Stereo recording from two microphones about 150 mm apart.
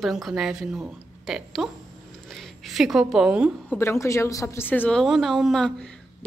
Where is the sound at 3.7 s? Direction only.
20° left (ahead or behind).